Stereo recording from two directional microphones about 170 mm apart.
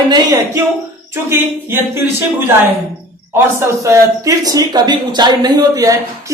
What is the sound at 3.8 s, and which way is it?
Speech, 20° right (ahead or behind).